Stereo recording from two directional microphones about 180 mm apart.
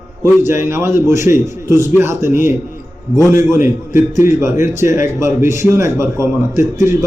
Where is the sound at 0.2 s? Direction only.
15° right (ahead or behind).